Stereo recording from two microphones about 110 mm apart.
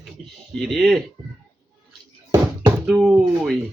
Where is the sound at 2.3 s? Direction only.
35° right (ahead or behind).